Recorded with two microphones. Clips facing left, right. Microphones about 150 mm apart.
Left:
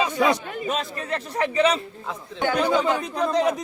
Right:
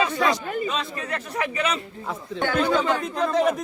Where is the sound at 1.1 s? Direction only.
30° left (ahead or behind).